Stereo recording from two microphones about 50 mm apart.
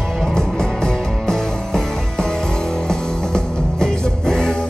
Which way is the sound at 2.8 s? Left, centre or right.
Centre.